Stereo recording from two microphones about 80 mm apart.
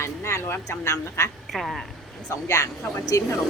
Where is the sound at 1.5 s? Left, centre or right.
Centre.